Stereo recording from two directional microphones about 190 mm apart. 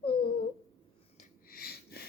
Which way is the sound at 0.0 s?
25° left (ahead or behind).